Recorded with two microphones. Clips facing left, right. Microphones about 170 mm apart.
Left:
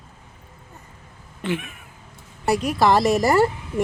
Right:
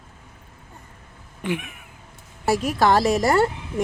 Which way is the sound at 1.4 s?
15° right (ahead or behind).